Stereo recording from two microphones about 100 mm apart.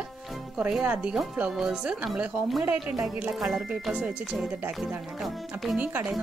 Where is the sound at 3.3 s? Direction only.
5° right (ahead or behind).